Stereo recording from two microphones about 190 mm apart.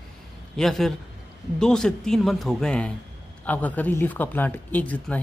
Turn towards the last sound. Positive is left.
turn(degrees=10)  # may be behind; listen again after turning